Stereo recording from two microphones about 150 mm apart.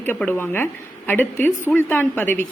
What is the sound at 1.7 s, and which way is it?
Speech, 15° left (ahead or behind).